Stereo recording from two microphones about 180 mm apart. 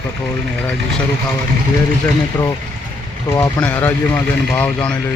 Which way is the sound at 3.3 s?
10° left (ahead or behind).